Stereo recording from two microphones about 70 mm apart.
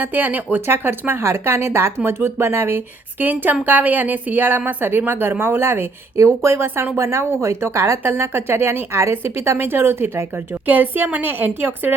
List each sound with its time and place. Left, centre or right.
0.0 s a woman's voice: right